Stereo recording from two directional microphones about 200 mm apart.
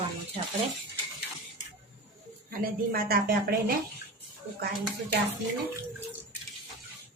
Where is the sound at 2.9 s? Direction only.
45° right (ahead or behind).